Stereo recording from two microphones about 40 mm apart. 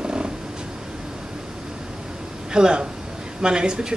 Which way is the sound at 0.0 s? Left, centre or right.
Right.